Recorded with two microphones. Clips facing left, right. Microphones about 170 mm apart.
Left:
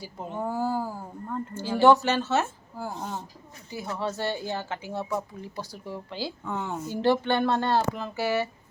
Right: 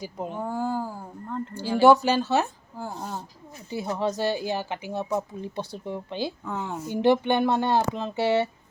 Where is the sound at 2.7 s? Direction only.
5° left (ahead or behind).